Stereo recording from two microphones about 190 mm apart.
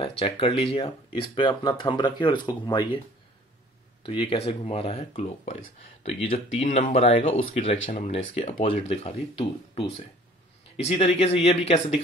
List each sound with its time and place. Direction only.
0.2 s speech: 30° left (ahead or behind)
4.0 s speech: 30° left (ahead or behind)
7.9 s speech: 40° left (ahead or behind)